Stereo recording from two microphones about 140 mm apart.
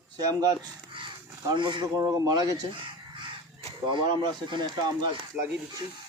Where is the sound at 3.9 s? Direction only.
35° right (ahead or behind).